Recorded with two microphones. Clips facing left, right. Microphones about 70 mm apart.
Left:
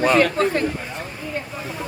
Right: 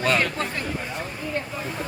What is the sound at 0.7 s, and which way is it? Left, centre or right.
Speech, centre.